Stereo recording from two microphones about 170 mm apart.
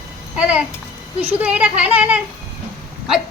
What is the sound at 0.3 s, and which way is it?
Speech, 10° right (ahead or behind).